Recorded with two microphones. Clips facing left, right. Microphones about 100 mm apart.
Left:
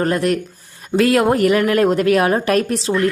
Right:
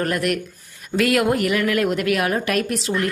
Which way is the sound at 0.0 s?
30° left (ahead or behind).